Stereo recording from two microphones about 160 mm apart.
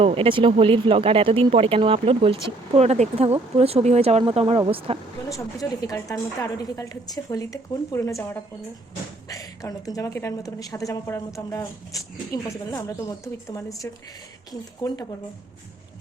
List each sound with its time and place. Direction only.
0.0 s speech: 35° right (ahead or behind)
5.3 s a woman's voice: 20° left (ahead or behind)